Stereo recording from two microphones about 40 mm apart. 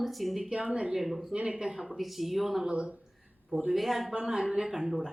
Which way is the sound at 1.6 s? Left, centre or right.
Centre.